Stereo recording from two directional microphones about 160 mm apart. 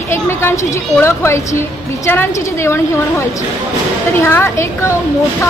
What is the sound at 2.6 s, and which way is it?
Speech, 15° left (ahead or behind).